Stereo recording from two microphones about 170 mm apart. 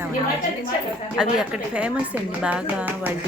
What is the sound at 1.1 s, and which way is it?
A woman's voice, 5° right (ahead or behind).